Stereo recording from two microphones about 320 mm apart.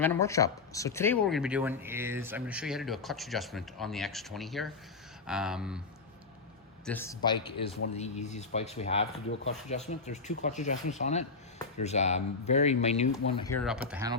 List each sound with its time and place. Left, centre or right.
0.0 s speech: centre
6.8 s a man's voice: centre
7.9 s speech: left
13.3 s speech: centre